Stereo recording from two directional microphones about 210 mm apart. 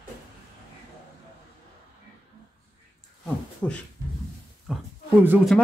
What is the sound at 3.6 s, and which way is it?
Speech, 10° left (ahead or behind).